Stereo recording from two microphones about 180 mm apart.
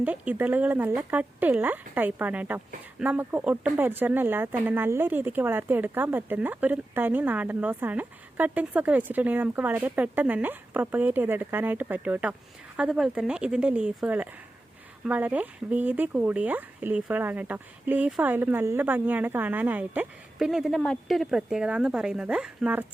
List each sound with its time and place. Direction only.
0.0 s speech: 10° right (ahead or behind)